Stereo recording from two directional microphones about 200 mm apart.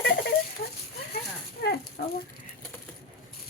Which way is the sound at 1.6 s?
50° left (ahead or behind).